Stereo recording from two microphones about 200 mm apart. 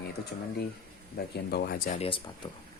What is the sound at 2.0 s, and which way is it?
Speech, 25° left (ahead or behind).